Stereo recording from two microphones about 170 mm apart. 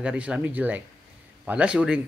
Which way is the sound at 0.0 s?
5° right (ahead or behind).